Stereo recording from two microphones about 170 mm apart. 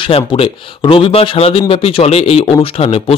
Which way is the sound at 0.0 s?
30° left (ahead or behind).